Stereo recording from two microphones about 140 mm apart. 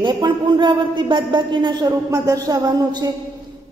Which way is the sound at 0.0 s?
35° right (ahead or behind).